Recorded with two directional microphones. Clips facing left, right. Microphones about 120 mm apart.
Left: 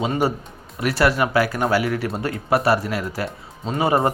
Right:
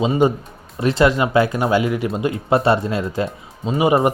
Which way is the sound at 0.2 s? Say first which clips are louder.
Right 5 dB; 20° right (ahead or behind).